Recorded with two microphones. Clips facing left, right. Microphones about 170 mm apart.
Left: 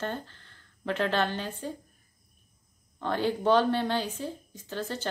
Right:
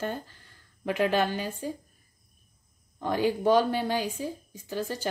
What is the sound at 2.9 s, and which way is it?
Speech, 10° right (ahead or behind).